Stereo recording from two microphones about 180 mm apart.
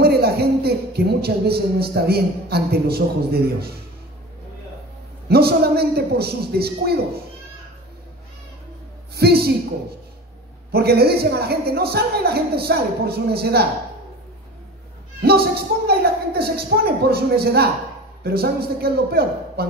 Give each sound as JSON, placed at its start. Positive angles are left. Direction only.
{"t": 0.0, "sound": "speech", "side_deg": -60}
{"t": 5.3, "sound": "speech", "side_deg": -60}
{"t": 9.1, "sound": "speech", "side_deg": -60}
{"t": 10.7, "sound": "speech", "side_deg": -60}
{"t": 15.2, "sound": "speech", "side_deg": -60}